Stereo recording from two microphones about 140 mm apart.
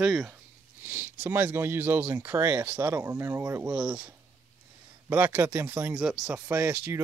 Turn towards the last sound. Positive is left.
turn(degrees=-15)  # may be behind; listen again after turning